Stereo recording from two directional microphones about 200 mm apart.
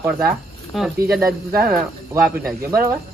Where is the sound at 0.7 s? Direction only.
Centre (ahead or behind).